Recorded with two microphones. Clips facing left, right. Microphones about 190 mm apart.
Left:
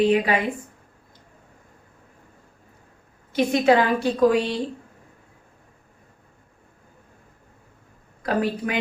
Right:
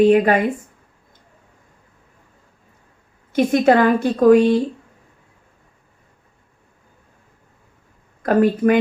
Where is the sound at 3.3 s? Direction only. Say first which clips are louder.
Right 4 dB; 50° right (ahead or behind).